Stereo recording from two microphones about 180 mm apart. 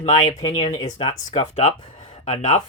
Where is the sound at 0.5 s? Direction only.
25° left (ahead or behind).